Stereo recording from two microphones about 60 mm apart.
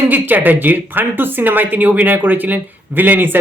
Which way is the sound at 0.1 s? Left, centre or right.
Right.